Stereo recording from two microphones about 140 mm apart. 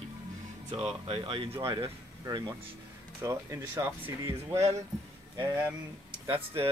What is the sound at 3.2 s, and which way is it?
Speech, 20° right (ahead or behind).